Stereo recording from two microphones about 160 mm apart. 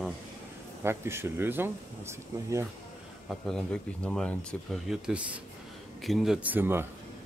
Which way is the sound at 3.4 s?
5° left (ahead or behind).